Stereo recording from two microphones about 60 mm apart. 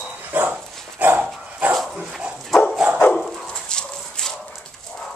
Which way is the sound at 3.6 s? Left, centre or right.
Centre.